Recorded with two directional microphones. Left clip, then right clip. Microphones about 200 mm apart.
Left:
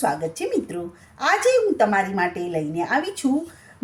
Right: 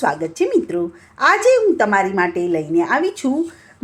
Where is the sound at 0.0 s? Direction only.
20° right (ahead or behind).